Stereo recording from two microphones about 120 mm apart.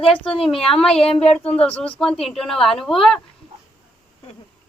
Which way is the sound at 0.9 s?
55° left (ahead or behind).